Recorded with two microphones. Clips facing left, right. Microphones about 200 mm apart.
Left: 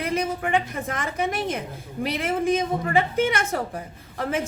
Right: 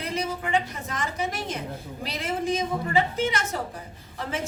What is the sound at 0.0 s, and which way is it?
A woman's voice, 55° left (ahead or behind).